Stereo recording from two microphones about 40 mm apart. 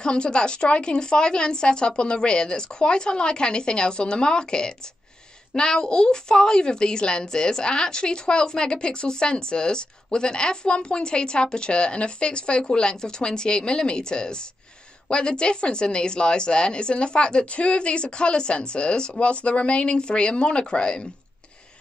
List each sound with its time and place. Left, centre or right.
0.0 s a woman's voice: left